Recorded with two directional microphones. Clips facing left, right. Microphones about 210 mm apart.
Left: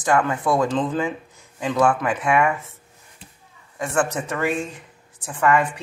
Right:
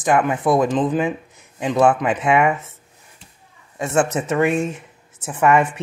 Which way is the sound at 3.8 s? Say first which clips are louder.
Right 3 dB; 25° right (ahead or behind).